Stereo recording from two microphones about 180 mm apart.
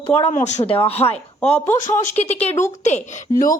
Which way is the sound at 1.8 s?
45° left (ahead or behind).